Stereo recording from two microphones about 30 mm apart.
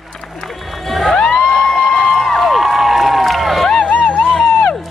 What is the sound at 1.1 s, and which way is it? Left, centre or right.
Music, left.